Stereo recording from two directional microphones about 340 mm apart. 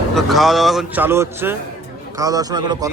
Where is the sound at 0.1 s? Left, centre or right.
Centre.